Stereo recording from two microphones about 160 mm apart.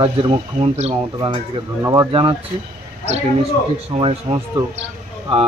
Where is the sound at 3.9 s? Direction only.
35° right (ahead or behind).